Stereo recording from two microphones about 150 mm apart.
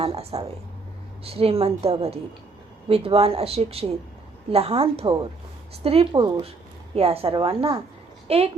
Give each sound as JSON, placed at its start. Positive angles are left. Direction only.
{"t": 0.0, "sound": "speech", "side_deg": -40}
{"t": 6.1, "sound": "speech", "side_deg": -25}
{"t": 6.9, "sound": "speech", "side_deg": -40}